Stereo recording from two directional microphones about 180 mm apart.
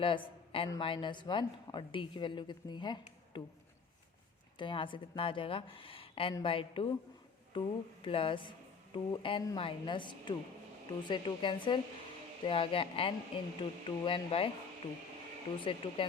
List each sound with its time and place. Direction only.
0.0 s a woman's voice: 30° left (ahead or behind)
4.5 s a woman's voice: 25° left (ahead or behind)
15.5 s a woman's voice: 30° left (ahead or behind)